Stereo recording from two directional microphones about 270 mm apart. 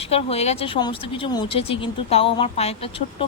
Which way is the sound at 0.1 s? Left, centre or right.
Left.